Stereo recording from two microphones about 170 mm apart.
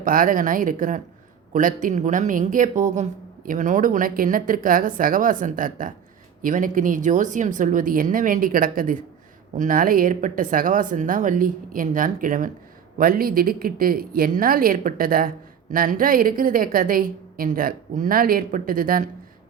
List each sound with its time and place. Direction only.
0.0 s a woman's voice: 55° right (ahead or behind)